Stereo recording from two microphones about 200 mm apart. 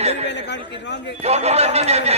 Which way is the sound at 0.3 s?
60° left (ahead or behind).